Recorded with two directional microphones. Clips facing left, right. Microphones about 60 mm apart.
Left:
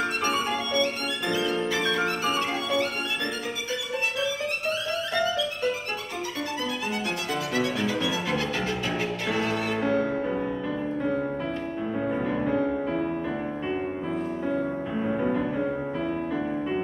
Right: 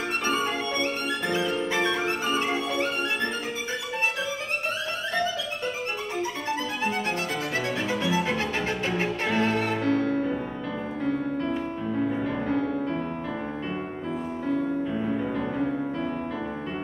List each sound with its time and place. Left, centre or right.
0.2 s violin: right
1.3 s music: right
7.5 s music: right
9.8 s music: centre
12.0 s music: centre
15.1 s music: centre